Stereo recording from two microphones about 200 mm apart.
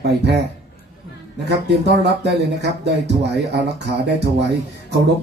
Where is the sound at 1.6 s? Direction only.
55° right (ahead or behind).